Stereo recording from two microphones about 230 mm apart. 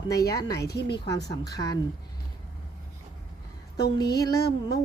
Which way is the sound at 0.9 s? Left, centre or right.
Centre.